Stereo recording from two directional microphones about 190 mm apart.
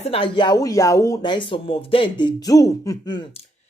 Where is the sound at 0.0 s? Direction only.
30° left (ahead or behind).